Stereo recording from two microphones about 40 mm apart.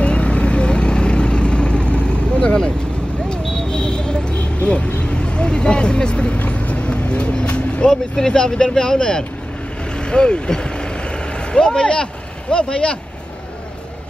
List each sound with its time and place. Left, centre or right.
0.0 s vehicle: left
6.3 s vehicle: left
8.3 s speech: left
9.9 s vehicle: left
11.5 s speech: left